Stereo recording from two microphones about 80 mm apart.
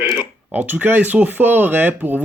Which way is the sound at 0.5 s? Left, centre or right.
Right.